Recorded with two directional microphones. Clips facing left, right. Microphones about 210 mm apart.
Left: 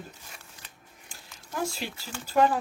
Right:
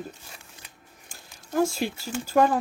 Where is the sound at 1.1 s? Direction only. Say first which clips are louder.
Right 8 dB; 45° right (ahead or behind).